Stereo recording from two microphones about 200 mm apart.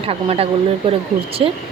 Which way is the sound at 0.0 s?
30° right (ahead or behind).